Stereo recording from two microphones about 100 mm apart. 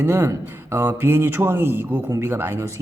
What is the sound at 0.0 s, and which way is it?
Speech, 25° right (ahead or behind).